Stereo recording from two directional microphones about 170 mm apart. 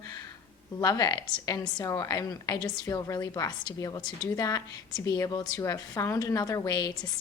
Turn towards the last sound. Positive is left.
turn(degrees=25)  # may be behind; listen again after turning